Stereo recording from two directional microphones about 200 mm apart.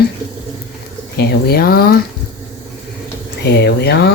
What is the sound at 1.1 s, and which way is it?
Speech, 50° left (ahead or behind).